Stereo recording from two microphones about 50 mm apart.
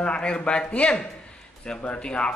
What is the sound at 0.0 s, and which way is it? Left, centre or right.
A man's voice, centre.